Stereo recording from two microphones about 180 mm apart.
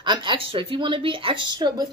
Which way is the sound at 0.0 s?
25° right (ahead or behind).